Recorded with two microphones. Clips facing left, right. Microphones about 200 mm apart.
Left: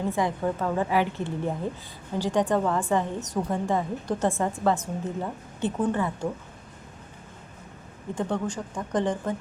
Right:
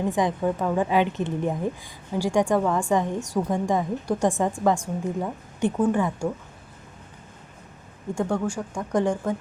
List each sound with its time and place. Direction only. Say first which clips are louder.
0.1 s a woman's voice: right 3 dB; 15° right (ahead or behind)
8.1 s a woman's voice: right 3 dB; 10° right (ahead or behind)